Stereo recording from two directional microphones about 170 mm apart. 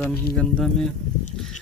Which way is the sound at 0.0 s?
5° left (ahead or behind).